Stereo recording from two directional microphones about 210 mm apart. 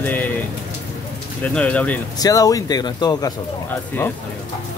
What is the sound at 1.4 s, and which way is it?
Speech, 5° left (ahead or behind).